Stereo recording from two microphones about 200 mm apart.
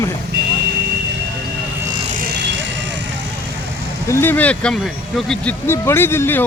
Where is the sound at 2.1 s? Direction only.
50° right (ahead or behind).